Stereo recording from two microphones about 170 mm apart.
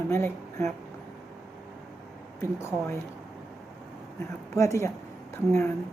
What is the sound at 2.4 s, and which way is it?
Speech, 15° left (ahead or behind).